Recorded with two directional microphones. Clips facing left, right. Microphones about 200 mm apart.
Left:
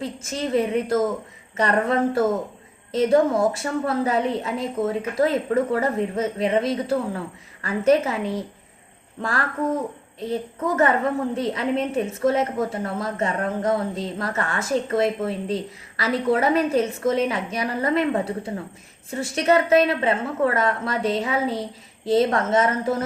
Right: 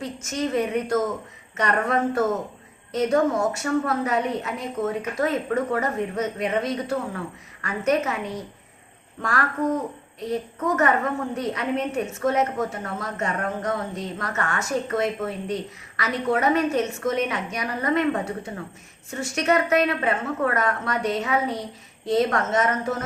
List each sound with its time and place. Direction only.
0.0 s a woman's voice: 30° left (ahead or behind)
10.2 s a woman's voice: 30° left (ahead or behind)